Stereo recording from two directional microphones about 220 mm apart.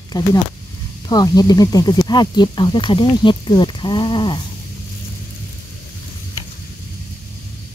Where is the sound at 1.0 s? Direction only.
20° left (ahead or behind).